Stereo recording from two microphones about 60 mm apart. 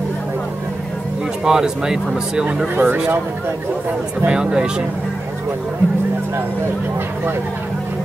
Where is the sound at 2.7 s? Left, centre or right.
Right.